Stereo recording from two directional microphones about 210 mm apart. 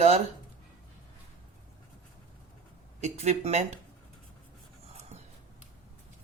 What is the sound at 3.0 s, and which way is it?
Speech, 35° right (ahead or behind).